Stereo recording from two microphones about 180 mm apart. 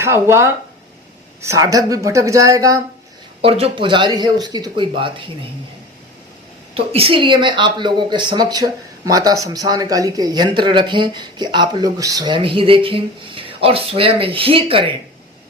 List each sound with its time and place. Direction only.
0.0 s speech: 15° right (ahead or behind)
3.4 s speech: 30° right (ahead or behind)
6.7 s speech: 30° right (ahead or behind)